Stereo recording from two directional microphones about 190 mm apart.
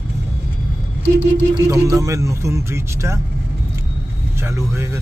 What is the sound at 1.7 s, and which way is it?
Speech, 15° right (ahead or behind).